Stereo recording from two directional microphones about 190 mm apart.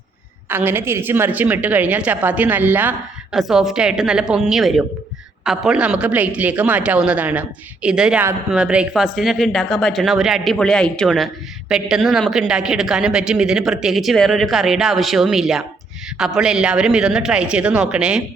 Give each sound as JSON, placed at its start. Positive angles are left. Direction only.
{"t": 0.4, "sound": "a woman's voice", "side_deg": -10}